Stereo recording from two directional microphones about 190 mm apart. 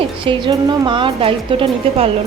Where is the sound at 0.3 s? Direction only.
25° right (ahead or behind).